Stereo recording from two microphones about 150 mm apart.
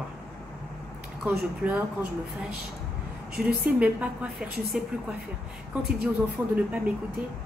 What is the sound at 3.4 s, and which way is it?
Speech, 90° right.